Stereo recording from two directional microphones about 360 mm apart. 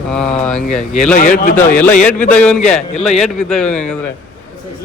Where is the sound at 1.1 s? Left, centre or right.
Left.